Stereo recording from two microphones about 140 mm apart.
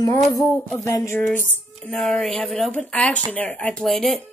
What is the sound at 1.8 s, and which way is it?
Speech, 5° left (ahead or behind).